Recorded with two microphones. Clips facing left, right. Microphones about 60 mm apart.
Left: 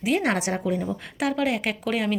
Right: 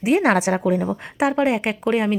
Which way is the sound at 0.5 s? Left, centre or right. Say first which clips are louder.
Right 6 dB; right.